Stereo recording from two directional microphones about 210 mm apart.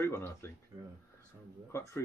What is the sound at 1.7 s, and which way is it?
Speech, 10° left (ahead or behind).